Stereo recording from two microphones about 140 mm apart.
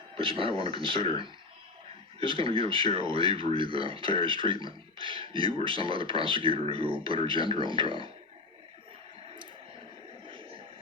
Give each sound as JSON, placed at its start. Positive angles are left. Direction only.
{"t": 0.2, "sound": "speech", "side_deg": -40}
{"t": 7.9, "sound": "speech", "side_deg": 30}